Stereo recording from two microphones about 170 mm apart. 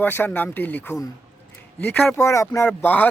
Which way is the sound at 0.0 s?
10° left (ahead or behind).